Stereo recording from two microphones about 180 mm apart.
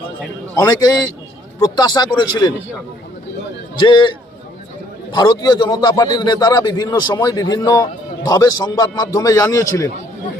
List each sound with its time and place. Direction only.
0.6 s a man's voice: 20° left (ahead or behind)
3.8 s a man's voice: 25° left (ahead or behind)
5.1 s a man's voice: 25° left (ahead or behind)